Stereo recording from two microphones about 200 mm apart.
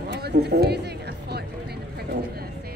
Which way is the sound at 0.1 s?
55° right (ahead or behind).